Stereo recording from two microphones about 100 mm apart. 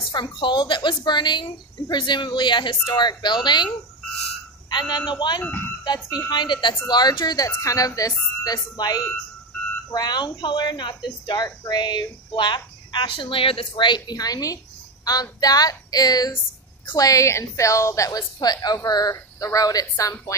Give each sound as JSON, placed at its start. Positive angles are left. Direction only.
{"t": 0.1, "sound": "speech", "side_deg": 50}
{"t": 4.6, "sound": "a man's voice", "side_deg": 45}
{"t": 5.4, "sound": "speech", "side_deg": 15}
{"t": 6.0, "sound": "a woman's voice", "side_deg": 45}